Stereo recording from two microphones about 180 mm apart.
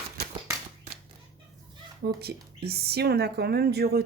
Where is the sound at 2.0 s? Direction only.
60° right (ahead or behind).